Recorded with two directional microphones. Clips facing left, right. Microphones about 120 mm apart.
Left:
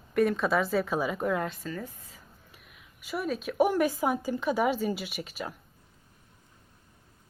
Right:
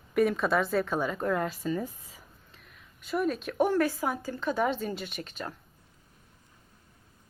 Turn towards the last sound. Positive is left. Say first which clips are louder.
# left 1 dB
turn(degrees=10)  # may be behind; listen again after turning